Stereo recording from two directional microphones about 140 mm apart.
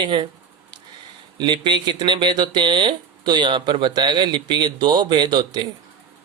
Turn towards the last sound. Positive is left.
turn(degrees=-30)  # may be behind; listen again after turning